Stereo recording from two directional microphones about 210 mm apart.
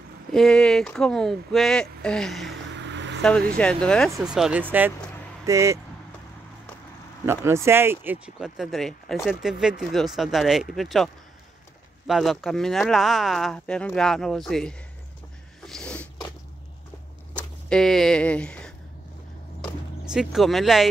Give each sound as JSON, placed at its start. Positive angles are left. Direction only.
{"t": 0.3, "sound": "speech", "side_deg": 5}
{"t": 2.7, "sound": "vehicle", "side_deg": -60}
{"t": 3.2, "sound": "speech", "side_deg": 5}
{"t": 7.2, "sound": "speech", "side_deg": -10}
{"t": 12.1, "sound": "speech", "side_deg": 0}
{"t": 15.6, "sound": "a sound", "side_deg": 5}
{"t": 17.4, "sound": "speech", "side_deg": 5}
{"t": 20.1, "sound": "speech", "side_deg": 0}